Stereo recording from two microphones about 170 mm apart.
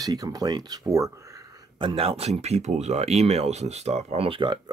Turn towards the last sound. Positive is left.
turn(degrees=-30)  # may be behind; listen again after turning